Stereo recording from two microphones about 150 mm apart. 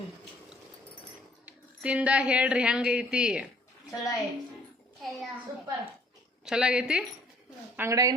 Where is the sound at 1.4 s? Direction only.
10° right (ahead or behind).